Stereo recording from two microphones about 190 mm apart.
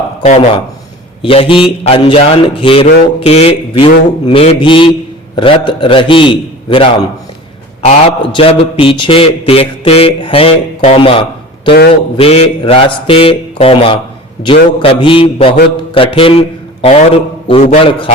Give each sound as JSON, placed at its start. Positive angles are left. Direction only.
{"t": 1.2, "sound": "a man's voice", "side_deg": 30}